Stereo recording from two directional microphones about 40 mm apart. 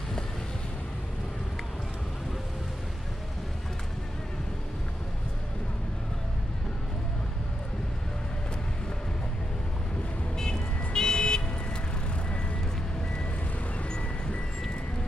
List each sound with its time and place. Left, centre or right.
10.3 s vehicle: centre
13.8 s music: left